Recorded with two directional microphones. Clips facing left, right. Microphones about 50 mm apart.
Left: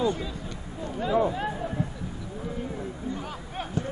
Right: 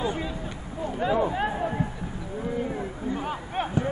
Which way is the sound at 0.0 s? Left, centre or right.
Right.